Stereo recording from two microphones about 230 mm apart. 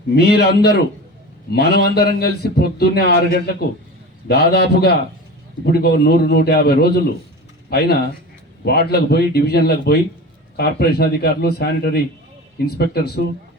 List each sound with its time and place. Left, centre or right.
0.2 s a man's voice: left